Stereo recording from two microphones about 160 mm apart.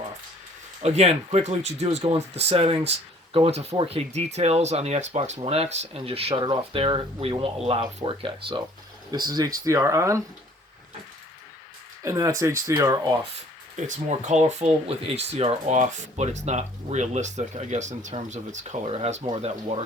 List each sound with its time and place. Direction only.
0.8 s speech: 40° right (ahead or behind); by 10.2 s 20° right (ahead or behind)
12.0 s speech: 20° right (ahead or behind)
13.7 s speech: 50° right (ahead or behind)